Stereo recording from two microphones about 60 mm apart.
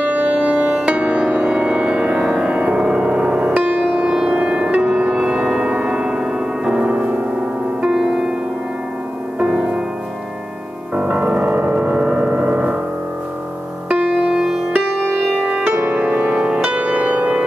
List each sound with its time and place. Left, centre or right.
0.0 s music: right; by 8.3 s centre
9.4 s music: centre
11.0 s music: right
12.3 s gong: right
13.8 s music: centre
14.7 s music: right